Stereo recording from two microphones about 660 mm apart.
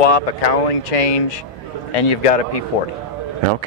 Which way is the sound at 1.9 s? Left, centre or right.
Left.